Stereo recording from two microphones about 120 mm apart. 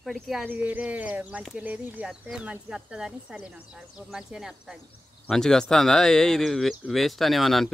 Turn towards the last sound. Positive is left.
turn(degrees=0)  # may be behind; listen again after turning